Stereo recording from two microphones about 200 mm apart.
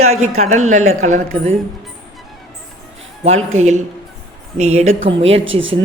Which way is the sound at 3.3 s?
90° right.